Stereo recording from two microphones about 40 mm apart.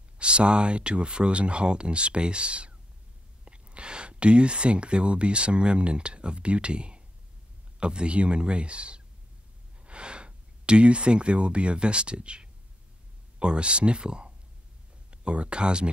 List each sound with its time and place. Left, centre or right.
0.2 s speech: right